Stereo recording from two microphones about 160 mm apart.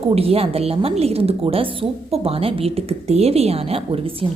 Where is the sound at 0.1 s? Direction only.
40° right (ahead or behind).